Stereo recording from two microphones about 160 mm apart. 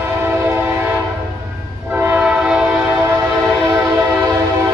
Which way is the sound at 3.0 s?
15° right (ahead or behind).